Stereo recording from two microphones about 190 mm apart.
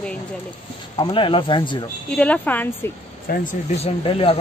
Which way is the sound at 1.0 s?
25° left (ahead or behind).